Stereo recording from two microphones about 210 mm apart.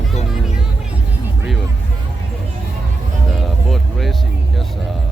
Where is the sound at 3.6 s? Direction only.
Centre (ahead or behind).